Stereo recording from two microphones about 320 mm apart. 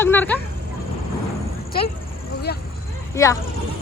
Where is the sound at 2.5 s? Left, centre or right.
Left.